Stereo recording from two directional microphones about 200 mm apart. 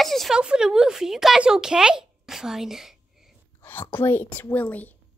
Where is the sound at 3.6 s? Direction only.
10° left (ahead or behind).